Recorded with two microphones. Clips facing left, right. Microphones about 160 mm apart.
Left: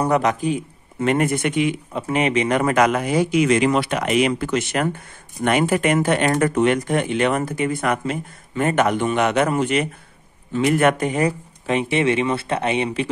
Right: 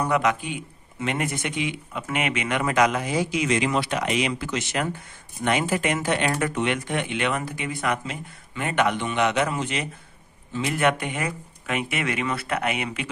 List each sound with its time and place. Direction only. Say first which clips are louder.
0.0 s speech: left 4 dB; 40° left (ahead or behind)
2.0 s speech: left 7 dB; 35° left (ahead or behind)